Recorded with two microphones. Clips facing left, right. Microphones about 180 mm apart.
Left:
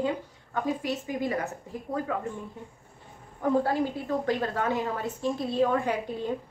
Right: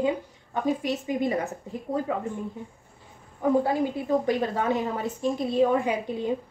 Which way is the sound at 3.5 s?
15° right (ahead or behind).